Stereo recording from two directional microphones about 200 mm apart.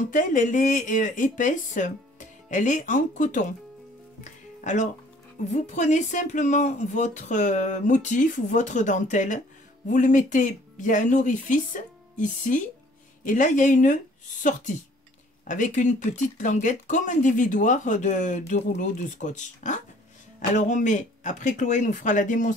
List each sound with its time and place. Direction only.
0.1 s speech: 40° left (ahead or behind)
4.2 s music: 40° left (ahead or behind)
5.5 s speech: 35° left (ahead or behind)